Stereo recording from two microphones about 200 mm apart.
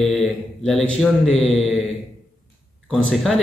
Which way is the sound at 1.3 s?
30° left (ahead or behind).